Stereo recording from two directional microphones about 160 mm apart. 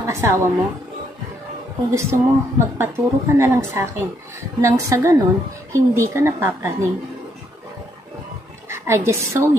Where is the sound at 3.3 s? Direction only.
15° right (ahead or behind).